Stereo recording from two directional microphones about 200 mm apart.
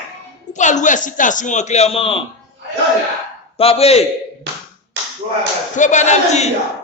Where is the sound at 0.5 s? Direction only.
40° left (ahead or behind).